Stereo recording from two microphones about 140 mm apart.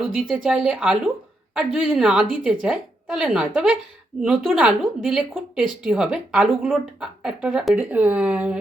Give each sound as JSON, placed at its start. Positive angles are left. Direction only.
{"t": 0.0, "sound": "speech", "side_deg": 0}